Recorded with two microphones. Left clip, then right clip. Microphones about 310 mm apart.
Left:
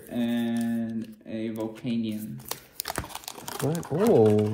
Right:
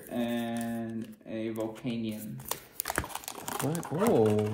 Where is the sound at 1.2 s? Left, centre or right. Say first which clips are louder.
Left 1 dB; left.